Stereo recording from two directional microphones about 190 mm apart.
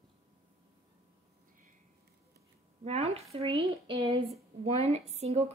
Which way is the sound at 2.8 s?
35° right (ahead or behind).